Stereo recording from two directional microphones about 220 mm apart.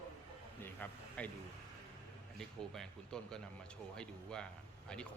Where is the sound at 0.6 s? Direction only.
5° left (ahead or behind).